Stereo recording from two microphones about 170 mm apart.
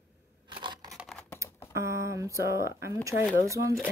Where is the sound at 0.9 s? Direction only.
Centre (ahead or behind).